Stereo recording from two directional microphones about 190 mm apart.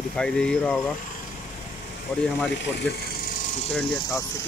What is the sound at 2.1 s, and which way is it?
Speech, 5° left (ahead or behind).